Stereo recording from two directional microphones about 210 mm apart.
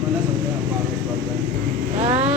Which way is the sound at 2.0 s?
30° right (ahead or behind).